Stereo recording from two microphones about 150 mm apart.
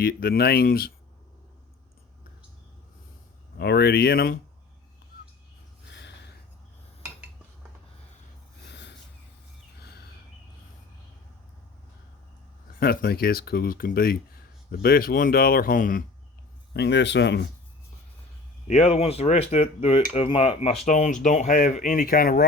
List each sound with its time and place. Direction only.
0.0 s speech: 90° left
3.6 s speech: 90° left
12.8 s speech: 90° left; by 16.0 s 65° left (ahead or behind)
18.7 s speech: 40° left (ahead or behind)
20.8 s speech: 55° left (ahead or behind); by 22.4 s 80° left